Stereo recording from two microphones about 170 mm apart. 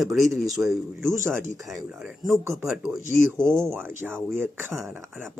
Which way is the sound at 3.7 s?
15° right (ahead or behind).